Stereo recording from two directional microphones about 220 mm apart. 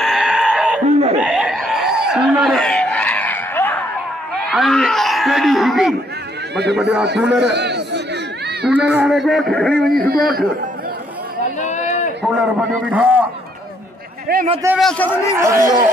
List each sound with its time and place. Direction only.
0.0 s goat: centre (ahead or behind)
1.2 s a sound: 5° right (ahead or behind)
6.5 s a man's voice: 50° right (ahead or behind)
7.4 s chatter: 50° right (ahead or behind)
8.6 s speech: 5° right (ahead or behind)
9.9 s a man's voice: 40° right (ahead or behind)
11.6 s run: 35° left (ahead or behind)
12.2 s a man's voice: 5° right (ahead or behind)
14.3 s a man's voice: 45° right (ahead or behind)
14.8 s a man's voice: 5° left (ahead or behind)
15.3 s a man's voice: 15° right (ahead or behind)